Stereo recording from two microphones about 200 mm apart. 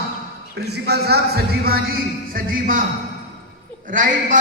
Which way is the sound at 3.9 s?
40° right (ahead or behind).